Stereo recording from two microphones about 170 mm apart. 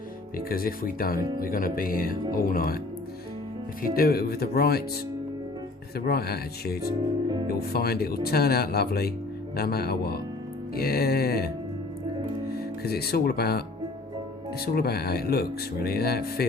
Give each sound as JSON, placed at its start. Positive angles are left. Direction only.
{"t": 0.5, "sound": "speech", "side_deg": 60}
{"t": 3.9, "sound": "speech", "side_deg": 60}
{"t": 6.1, "sound": "speech", "side_deg": 65}
{"t": 12.8, "sound": "speech", "side_deg": 70}
{"t": 14.6, "sound": "speech", "side_deg": 65}